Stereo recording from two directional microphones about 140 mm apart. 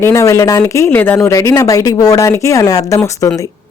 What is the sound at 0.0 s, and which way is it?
A woman's voice, 20° left (ahead or behind).